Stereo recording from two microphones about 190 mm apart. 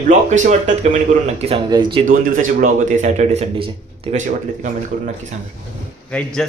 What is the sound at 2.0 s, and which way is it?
A man's voice, 45° right (ahead or behind).